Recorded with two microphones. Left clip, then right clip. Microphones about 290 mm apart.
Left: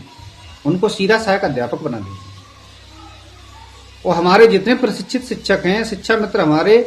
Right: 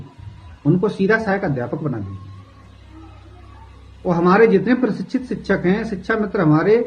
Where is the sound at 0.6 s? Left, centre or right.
Centre.